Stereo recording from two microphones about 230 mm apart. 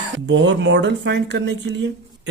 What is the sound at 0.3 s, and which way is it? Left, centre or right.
Speech, right.